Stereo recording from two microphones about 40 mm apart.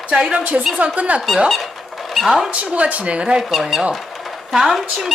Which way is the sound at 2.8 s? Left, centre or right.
Right.